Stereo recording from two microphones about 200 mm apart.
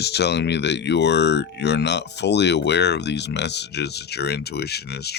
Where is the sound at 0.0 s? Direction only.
55° left (ahead or behind).